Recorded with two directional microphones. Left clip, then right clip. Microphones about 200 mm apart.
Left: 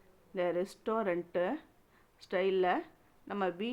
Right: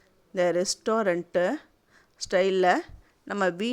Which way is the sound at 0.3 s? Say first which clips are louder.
Right 9 dB; 40° right (ahead or behind).